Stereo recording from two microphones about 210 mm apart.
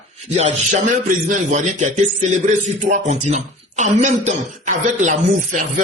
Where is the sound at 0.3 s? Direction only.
35° right (ahead or behind).